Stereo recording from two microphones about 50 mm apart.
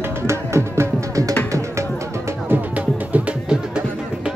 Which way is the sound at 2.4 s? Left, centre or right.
Right.